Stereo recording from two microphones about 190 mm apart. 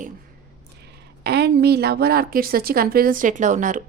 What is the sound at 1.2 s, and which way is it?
A woman's voice, 60° right (ahead or behind).